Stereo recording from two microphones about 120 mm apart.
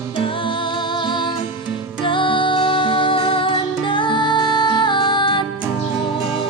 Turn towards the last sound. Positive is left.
turn(degrees=40)  # may be behind; listen again after turning